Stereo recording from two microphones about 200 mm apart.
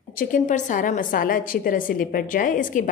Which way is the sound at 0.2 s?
40° left (ahead or behind).